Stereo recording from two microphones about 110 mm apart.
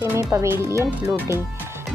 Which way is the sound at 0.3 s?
25° right (ahead or behind).